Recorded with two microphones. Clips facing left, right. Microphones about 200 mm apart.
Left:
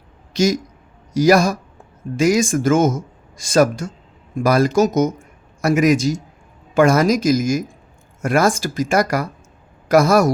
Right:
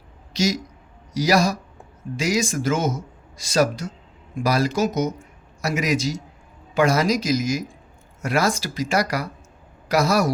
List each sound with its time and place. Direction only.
0.3 s speech: 50° left (ahead or behind)